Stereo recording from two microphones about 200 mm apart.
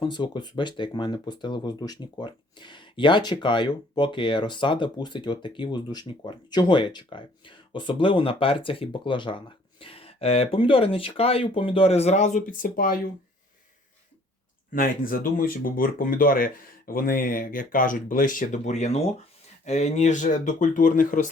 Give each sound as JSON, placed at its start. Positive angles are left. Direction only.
{"t": 0.0, "sound": "speech", "side_deg": 20}
{"t": 14.7, "sound": "speech", "side_deg": 45}